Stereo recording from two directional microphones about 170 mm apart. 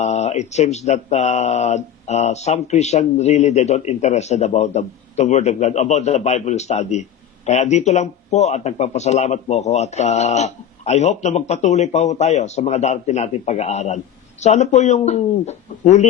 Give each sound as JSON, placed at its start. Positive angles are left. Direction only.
{"t": 0.0, "sound": "speech", "side_deg": 40}